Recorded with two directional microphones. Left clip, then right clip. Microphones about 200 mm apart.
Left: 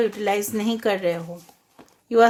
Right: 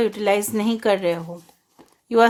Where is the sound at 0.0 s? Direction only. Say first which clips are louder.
Right 2 dB; 35° right (ahead or behind).